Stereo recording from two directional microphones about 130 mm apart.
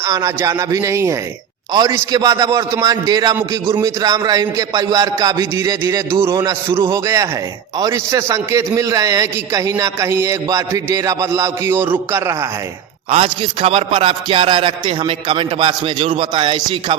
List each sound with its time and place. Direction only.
0.0 s a man's voice: 25° right (ahead or behind)
13.1 s music: 45° right (ahead or behind)